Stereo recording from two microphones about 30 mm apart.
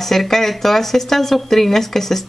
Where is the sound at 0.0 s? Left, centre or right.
Centre.